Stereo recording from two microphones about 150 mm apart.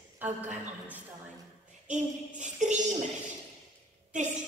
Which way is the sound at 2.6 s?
55° right (ahead or behind).